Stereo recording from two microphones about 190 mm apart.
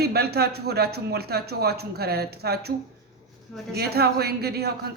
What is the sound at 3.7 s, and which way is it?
Speech, 55° right (ahead or behind).